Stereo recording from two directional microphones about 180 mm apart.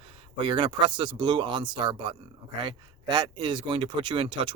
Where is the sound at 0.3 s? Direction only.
30° right (ahead or behind).